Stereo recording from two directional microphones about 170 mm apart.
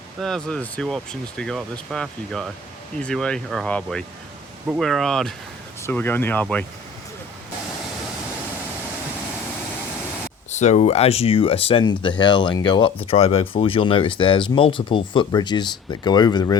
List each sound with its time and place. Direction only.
0.2 s speech: 5° left (ahead or behind)
10.5 s speech: 40° left (ahead or behind); by 16.6 s 25° left (ahead or behind)